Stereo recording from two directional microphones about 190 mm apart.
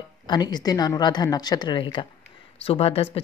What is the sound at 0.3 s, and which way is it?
Speech, 20° left (ahead or behind).